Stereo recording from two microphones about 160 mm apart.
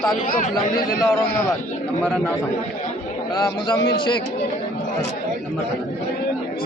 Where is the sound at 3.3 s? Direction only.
25° left (ahead or behind).